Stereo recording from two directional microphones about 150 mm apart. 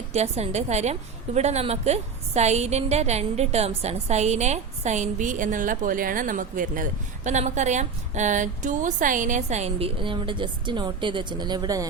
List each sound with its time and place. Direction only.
0.1 s a woman's voice: 45° right (ahead or behind); by 6.8 s 65° right (ahead or behind)
7.3 s a woman's voice: 50° right (ahead or behind); by 11.9 s 25° right (ahead or behind)